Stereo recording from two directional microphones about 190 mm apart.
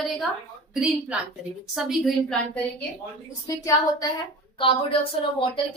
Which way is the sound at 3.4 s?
20° left (ahead or behind).